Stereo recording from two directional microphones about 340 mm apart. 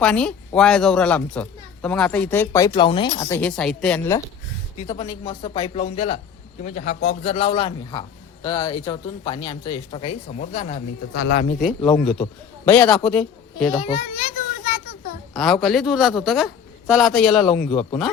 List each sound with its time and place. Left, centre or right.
0.0 s speech: centre
11.1 s a man's voice: left
11.6 s speech: centre
13.7 s children playing: centre
15.4 s speech: centre